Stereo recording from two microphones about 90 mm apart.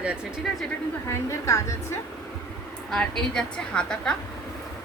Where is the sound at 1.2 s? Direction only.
35° left (ahead or behind).